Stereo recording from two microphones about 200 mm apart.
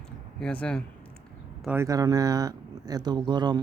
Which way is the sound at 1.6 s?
10° right (ahead or behind).